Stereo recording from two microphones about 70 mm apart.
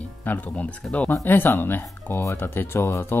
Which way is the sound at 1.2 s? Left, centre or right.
Left.